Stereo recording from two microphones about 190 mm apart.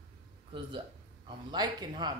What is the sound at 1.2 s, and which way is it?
Speech, 20° right (ahead or behind).